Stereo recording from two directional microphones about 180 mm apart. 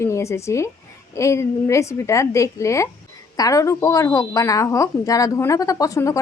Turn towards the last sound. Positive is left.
turn(degrees=20)  # may be behind; listen again after turning